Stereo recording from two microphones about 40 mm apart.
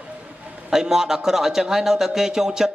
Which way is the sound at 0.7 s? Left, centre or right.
Centre.